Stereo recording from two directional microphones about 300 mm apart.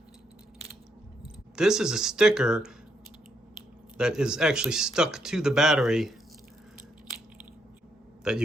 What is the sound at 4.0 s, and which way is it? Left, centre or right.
Speech, centre.